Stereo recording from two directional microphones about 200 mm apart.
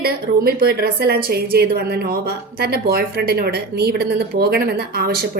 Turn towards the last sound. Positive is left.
turn(degrees=-50)  # may be behind; listen again after turning